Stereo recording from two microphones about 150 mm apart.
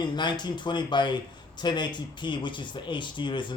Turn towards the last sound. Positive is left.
turn(degrees=30)  # may be behind; listen again after turning